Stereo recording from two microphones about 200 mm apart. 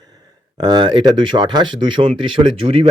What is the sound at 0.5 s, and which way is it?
Speech, 20° right (ahead or behind).